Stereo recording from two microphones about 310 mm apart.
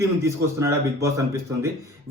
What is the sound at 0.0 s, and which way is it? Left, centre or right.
Speech, centre.